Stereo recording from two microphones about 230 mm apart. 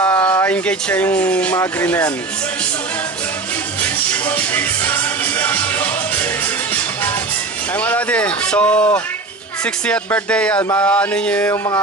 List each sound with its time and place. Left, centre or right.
0.0 s speech: centre
4.1 s music: centre
7.8 s speech: centre